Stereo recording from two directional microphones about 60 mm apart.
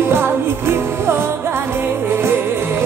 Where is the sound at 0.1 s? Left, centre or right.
Right.